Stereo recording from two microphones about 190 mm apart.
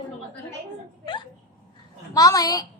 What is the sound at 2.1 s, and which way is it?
Speech, 20° left (ahead or behind).